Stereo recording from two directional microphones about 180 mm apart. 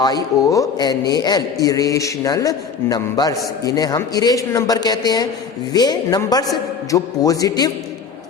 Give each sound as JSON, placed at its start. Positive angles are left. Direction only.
{"t": 0.0, "sound": "a man's voice", "side_deg": 20}